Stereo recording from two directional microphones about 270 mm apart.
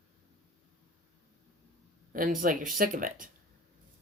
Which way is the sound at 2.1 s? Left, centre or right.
Right.